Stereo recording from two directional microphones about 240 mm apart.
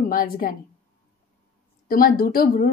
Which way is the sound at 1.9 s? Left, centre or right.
Left.